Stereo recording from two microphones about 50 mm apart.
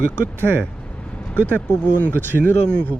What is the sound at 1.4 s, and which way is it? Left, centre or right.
Speech, left.